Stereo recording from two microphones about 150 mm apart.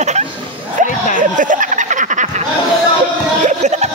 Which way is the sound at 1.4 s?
60° right (ahead or behind).